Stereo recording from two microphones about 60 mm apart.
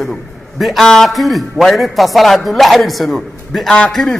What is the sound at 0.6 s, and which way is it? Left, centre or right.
A man's voice, centre.